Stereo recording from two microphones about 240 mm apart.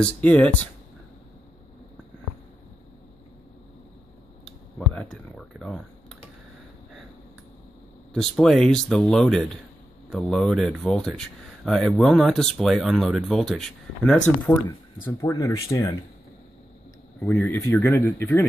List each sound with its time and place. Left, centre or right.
0.0 s speech: centre
4.5 s computer keyboard: centre
8.1 s speech: centre
17.2 s speech: centre